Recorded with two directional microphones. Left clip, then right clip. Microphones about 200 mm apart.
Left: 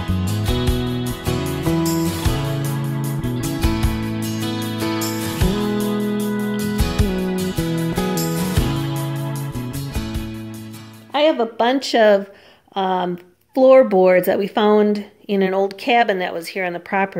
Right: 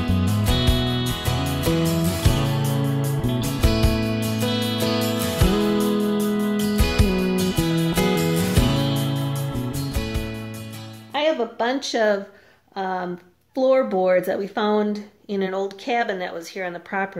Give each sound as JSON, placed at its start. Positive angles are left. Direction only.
{"t": 0.1, "sound": "music", "side_deg": 0}
{"t": 11.1, "sound": "a sound", "side_deg": 45}
{"t": 12.7, "sound": "speech", "side_deg": 45}